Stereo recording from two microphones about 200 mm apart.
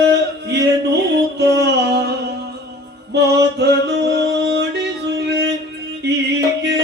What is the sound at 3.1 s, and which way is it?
Music, 60° right (ahead or behind).